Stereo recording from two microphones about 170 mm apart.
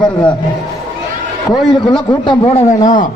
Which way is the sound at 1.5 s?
25° left (ahead or behind).